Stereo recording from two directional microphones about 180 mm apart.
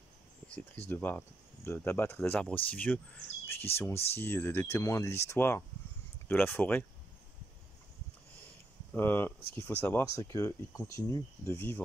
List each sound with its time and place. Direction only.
0.8 s speech: 10° left (ahead or behind)
3.9 s speech: 35° left (ahead or behind)
4.2 s speech: 10° left (ahead or behind)
8.9 s speech: 10° left (ahead or behind)